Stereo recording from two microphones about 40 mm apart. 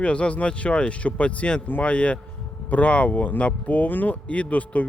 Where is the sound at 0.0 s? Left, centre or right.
Left.